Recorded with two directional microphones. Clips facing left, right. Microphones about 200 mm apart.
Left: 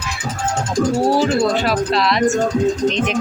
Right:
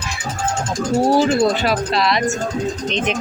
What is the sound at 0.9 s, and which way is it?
Speech, 25° right (ahead or behind).